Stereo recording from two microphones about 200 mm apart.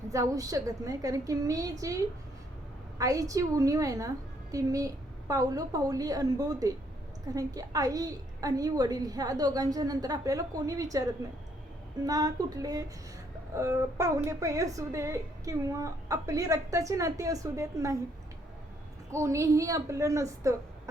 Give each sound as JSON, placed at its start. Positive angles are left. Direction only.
{"t": 0.1, "sound": "a woman's voice", "side_deg": -15}
{"t": 3.0, "sound": "a woman's voice", "side_deg": -15}
{"t": 12.0, "sound": "a woman's voice", "side_deg": -20}
{"t": 19.1, "sound": "a woman's voice", "side_deg": -15}